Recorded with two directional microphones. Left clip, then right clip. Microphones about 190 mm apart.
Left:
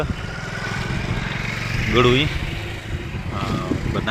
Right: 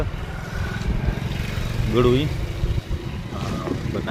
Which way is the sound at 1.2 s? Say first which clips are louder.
Left 6 dB; 20° right (ahead or behind).